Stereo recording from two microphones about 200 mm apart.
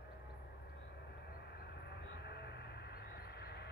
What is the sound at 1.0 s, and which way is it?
Vehicle, 55° left (ahead or behind).